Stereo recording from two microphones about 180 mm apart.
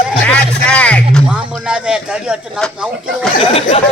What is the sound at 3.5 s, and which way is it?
Speech, 35° left (ahead or behind).